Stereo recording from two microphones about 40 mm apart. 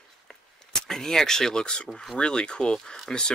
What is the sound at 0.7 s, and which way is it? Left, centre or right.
Speech, centre.